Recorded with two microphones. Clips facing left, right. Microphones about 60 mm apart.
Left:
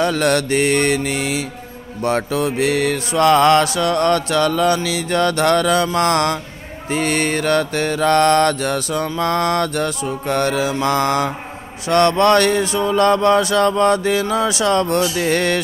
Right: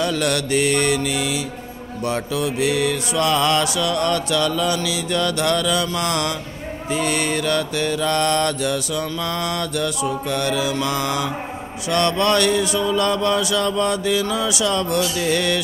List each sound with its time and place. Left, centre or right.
0.0 s mantra: left